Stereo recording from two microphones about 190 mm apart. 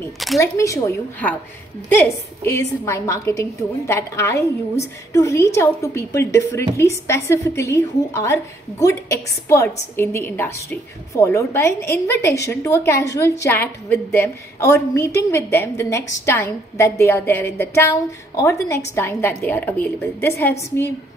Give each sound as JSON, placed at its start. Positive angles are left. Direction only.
{"t": 0.4, "sound": "a woman's voice", "side_deg": 15}